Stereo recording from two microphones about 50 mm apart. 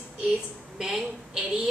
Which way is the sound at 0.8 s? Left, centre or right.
Centre.